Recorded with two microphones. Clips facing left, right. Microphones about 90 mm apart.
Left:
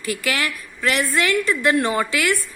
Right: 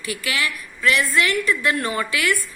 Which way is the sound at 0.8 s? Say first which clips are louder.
Right 1 dB; 30° left (ahead or behind).